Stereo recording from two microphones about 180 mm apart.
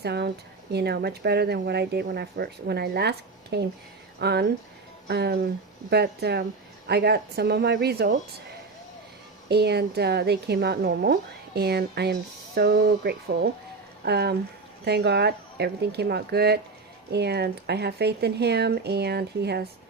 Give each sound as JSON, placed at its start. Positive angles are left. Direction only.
{"t": 0.0, "sound": "speech", "side_deg": -65}
{"t": 9.5, "sound": "speech", "side_deg": -65}